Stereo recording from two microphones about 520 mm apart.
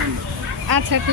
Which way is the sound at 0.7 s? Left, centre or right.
Right.